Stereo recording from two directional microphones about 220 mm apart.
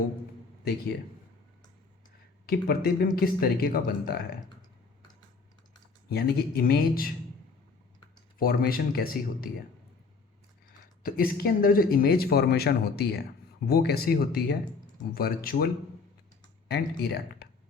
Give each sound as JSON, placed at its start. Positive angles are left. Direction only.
{"t": 0.6, "sound": "speech", "side_deg": 45}
{"t": 2.5, "sound": "speech", "side_deg": 45}
{"t": 6.1, "sound": "speech", "side_deg": 45}
{"t": 8.4, "sound": "speech", "side_deg": 40}
{"t": 11.0, "sound": "speech", "side_deg": 40}